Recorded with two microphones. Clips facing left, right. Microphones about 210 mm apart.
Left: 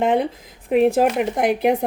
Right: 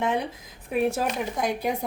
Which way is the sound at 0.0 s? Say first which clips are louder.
Left 8 dB; 55° left (ahead or behind).